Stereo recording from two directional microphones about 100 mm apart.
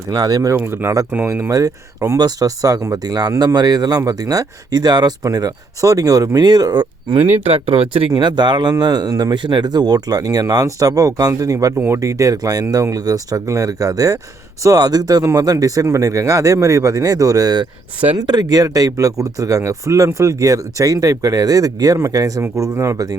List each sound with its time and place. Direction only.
0.1 s speech: 40° right (ahead or behind)
0.5 s speech: 20° right (ahead or behind)
1.5 s speech: 35° right (ahead or behind)
7.2 s speech: 15° right (ahead or behind)
7.5 s speech: 75° right (ahead or behind)
8.1 s speech: 50° right (ahead or behind)
17.6 s speech: 70° right (ahead or behind)
18.2 s speech: 40° right (ahead or behind)